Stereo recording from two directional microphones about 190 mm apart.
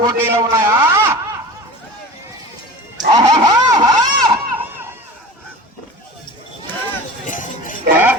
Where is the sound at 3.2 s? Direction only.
20° right (ahead or behind).